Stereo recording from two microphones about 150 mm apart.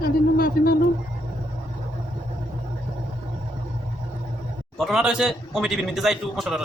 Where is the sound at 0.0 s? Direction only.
80° left.